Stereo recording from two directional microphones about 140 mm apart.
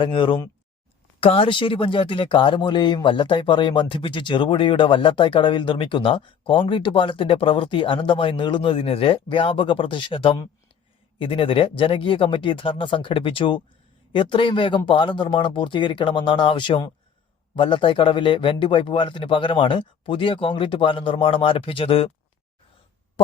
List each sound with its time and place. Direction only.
0.0 s speech: 35° left (ahead or behind)